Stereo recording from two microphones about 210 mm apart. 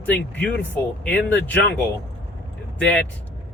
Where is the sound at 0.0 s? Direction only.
5° left (ahead or behind).